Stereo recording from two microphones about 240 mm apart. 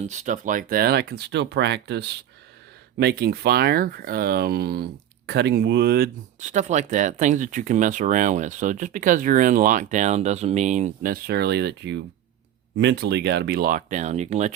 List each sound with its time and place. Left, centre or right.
0.1 s speech: right